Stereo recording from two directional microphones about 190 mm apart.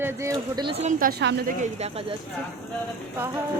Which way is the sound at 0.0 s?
15° right (ahead or behind).